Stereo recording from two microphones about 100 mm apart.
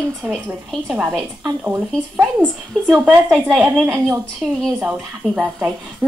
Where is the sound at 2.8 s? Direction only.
5° left (ahead or behind).